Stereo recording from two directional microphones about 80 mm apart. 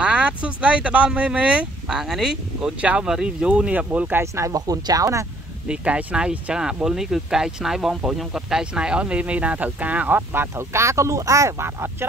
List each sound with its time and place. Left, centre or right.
0.0 s speech: centre
4.2 s speech: right
5.7 s speech: centre; by 12.1 s right